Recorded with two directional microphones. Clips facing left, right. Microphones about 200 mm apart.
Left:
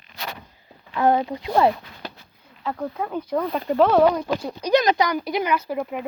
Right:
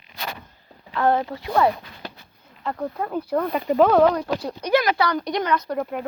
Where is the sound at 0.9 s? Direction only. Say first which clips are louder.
Left 1 dB; 15° left (ahead or behind).